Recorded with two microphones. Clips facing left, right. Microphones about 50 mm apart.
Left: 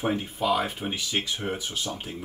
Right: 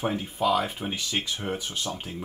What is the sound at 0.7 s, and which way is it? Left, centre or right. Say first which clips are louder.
Speech: left 1 dB; centre.